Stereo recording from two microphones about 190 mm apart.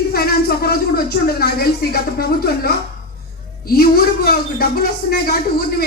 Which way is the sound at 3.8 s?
55° left (ahead or behind).